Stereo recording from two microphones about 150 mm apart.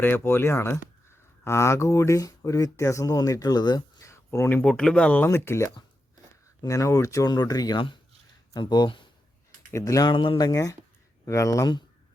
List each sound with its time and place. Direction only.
0.0 s speech: 15° left (ahead or behind)